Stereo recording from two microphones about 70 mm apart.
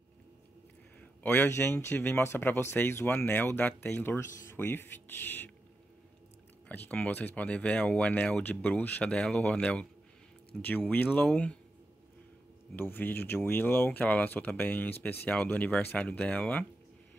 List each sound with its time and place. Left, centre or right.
1.2 s speech: left
1.5 s speech: left
6.7 s speech: left
11.1 s speech: left
12.7 s speech: left